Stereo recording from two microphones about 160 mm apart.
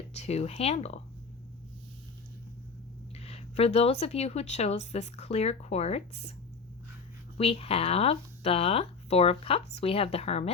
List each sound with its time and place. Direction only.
0.1 s speech: 40° left (ahead or behind)
3.2 s speech: 40° left (ahead or behind)
7.3 s speech: 40° left (ahead or behind)